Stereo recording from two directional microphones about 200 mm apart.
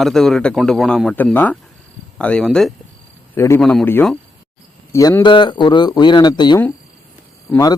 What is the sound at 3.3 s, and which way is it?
Speech, 15° left (ahead or behind).